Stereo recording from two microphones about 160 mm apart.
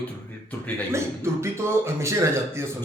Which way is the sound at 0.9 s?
15° right (ahead or behind).